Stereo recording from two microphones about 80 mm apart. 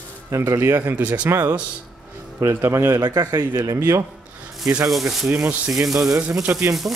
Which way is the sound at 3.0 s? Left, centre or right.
Right.